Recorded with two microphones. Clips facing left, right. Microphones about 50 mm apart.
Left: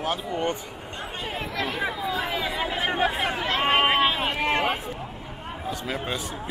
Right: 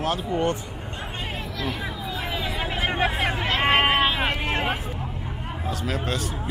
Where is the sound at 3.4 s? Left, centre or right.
Right.